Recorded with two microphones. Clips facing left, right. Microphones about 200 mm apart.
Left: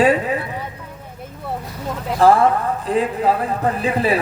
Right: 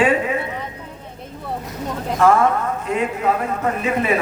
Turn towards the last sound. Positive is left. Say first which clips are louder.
# left 1 dB
turn(degrees=35)  # may be behind; listen again after turning